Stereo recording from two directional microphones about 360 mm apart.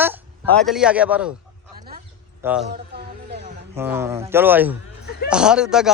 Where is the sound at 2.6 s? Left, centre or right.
Right.